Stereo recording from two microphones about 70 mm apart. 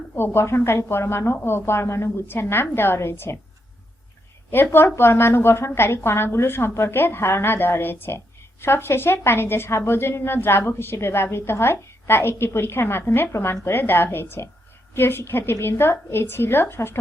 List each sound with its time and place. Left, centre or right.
0.2 s a woman's voice: left
4.5 s a woman's voice: left